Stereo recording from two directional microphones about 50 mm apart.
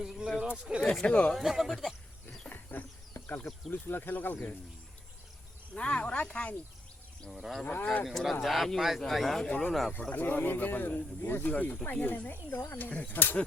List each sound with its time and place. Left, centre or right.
0.0 s speech: centre
0.4 s speech: centre
1.0 s speech: left
1.3 s speech: centre
2.5 s a sound: left
3.7 s speech: left
5.7 s speech: left
7.3 s speech: centre
7.6 s speech: left
8.0 s speech: centre
10.2 s speech: left